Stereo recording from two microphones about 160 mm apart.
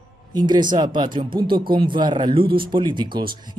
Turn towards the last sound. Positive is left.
turn(degrees=-30)  # may be behind; listen again after turning